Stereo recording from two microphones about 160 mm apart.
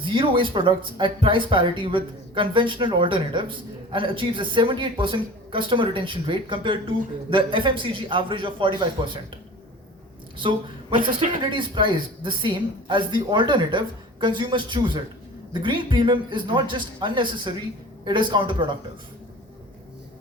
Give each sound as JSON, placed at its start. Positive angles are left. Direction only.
{"t": 0.0, "sound": "speech", "side_deg": -30}
{"t": 10.3, "sound": "a man's voice", "side_deg": -30}